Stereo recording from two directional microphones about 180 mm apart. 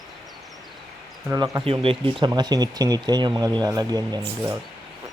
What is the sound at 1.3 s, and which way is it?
Speech, 20° right (ahead or behind).